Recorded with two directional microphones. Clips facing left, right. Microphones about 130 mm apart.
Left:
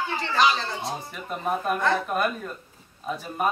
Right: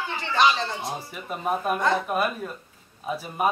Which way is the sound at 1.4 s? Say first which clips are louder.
Right 1 dB; 5° right (ahead or behind).